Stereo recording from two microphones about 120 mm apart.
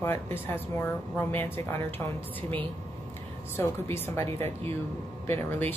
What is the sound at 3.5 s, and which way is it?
A woman's voice, 20° left (ahead or behind).